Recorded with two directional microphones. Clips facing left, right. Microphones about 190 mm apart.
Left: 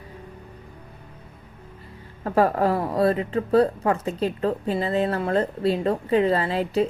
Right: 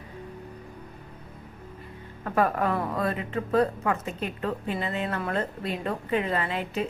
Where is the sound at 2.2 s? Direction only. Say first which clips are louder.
Left 5 dB; 30° left (ahead or behind).